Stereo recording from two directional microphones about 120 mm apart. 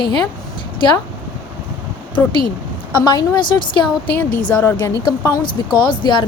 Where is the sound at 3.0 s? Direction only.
35° left (ahead or behind).